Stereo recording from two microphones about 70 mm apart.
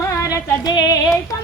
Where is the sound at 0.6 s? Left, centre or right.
Left.